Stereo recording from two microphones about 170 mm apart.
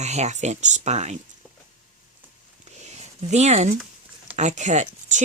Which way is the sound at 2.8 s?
40° right (ahead or behind).